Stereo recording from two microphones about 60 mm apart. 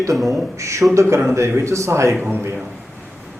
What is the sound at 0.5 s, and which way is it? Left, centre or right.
A man's voice, right.